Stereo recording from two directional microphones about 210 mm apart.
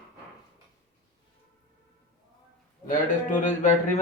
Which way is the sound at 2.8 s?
35° left (ahead or behind).